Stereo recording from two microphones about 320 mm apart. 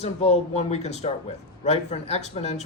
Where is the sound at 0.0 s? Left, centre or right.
Centre.